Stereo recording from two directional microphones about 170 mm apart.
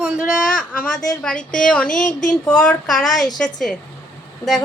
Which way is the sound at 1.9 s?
50° left (ahead or behind).